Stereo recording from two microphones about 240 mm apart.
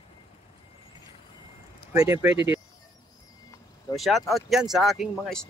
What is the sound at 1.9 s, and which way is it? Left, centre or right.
Speech, centre.